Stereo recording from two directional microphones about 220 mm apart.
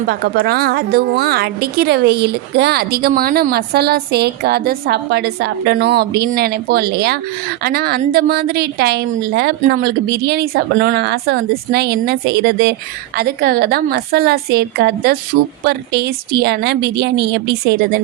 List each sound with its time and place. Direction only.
0.1 s a woman's voice: 45° right (ahead or behind)